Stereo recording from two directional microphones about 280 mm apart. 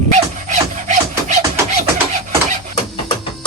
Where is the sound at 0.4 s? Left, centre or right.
Right.